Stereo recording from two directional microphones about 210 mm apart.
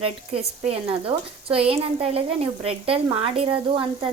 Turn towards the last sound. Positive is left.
turn(degrees=-25)  # may be behind; listen again after turning